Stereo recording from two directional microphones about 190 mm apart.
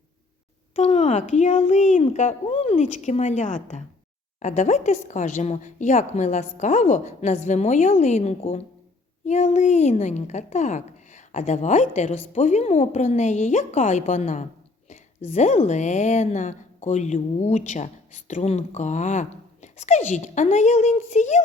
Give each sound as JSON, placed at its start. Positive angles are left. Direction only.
{"t": 0.8, "sound": "a woman's voice", "side_deg": 35}